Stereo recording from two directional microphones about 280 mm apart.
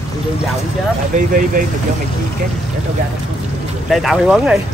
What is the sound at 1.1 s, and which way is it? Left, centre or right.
Speech, right.